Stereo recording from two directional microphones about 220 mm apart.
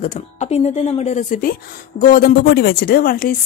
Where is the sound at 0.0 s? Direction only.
30° left (ahead or behind).